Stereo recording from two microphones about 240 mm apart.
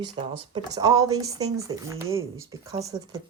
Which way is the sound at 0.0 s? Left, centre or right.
Centre.